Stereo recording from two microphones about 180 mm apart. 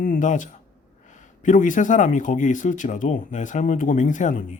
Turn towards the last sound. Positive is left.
turn(degrees=45)  # may be behind; listen again after turning